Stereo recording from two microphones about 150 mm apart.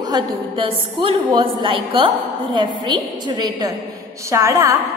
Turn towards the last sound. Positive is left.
turn(degrees=-20)  # may be behind; listen again after turning